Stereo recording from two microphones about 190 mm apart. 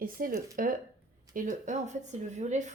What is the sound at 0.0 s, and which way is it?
A woman's voice, 50° right (ahead or behind).